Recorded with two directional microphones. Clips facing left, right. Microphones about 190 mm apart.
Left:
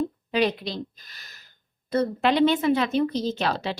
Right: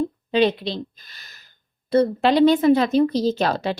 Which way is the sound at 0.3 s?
25° right (ahead or behind).